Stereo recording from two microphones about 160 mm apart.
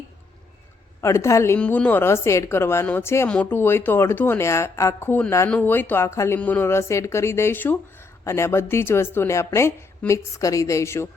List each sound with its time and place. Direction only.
1.0 s a woman's voice: 20° left (ahead or behind)